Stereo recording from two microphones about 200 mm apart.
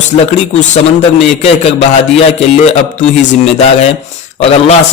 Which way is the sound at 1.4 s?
30° left (ahead or behind).